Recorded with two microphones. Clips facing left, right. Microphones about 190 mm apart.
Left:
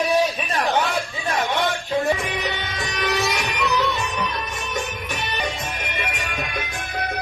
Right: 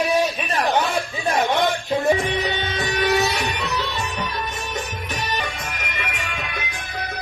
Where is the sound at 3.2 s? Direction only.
35° right (ahead or behind).